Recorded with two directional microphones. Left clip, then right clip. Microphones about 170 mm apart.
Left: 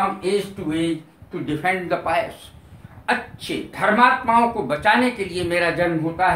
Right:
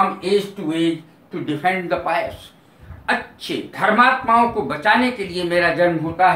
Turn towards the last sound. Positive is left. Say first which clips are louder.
# right 4 dB
turn(degrees=20)  # may be behind; listen again after turning